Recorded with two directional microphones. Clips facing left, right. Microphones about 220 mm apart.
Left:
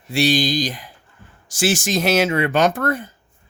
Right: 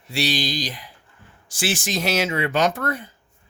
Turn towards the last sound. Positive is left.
turn(degrees=50)  # may be behind; listen again after turning